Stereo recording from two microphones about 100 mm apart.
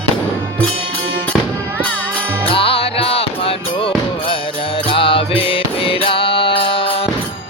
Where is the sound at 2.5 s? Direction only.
65° left (ahead or behind).